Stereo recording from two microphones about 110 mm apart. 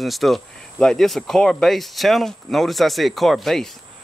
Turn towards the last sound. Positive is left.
turn(degrees=0)  # may be behind; listen again after turning